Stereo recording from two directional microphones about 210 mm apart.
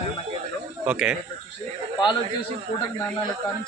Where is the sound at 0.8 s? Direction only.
5° right (ahead or behind).